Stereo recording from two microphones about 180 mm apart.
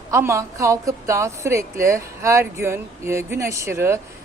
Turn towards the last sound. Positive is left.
turn(degrees=-15)  # may be behind; listen again after turning